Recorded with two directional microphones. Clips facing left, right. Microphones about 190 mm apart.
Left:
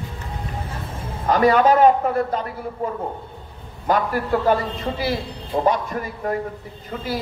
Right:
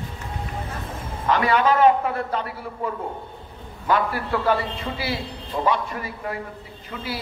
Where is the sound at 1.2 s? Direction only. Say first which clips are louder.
Left 4 dB; 40° left (ahead or behind).